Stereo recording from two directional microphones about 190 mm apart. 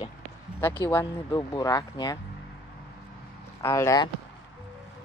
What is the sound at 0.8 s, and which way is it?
Speech, 15° left (ahead or behind).